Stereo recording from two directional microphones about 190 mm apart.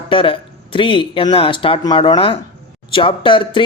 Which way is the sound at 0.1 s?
25° left (ahead or behind).